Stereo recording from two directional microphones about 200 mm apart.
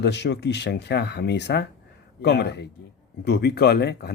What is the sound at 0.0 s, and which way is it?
Speech, 60° left (ahead or behind).